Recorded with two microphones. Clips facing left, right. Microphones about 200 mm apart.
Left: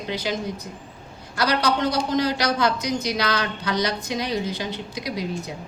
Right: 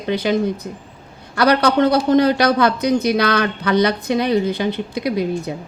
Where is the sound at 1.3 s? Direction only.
60° right (ahead or behind).